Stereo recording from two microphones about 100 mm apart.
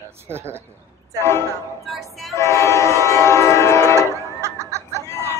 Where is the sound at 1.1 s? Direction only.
25° left (ahead or behind).